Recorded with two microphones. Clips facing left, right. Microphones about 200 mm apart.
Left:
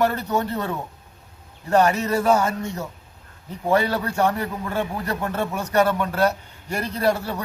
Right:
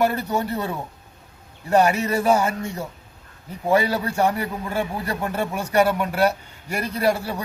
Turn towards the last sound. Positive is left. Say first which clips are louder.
# even
turn(degrees=-10)  # may be behind; listen again after turning